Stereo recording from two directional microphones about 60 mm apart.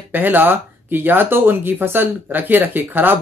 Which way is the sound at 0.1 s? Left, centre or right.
Right.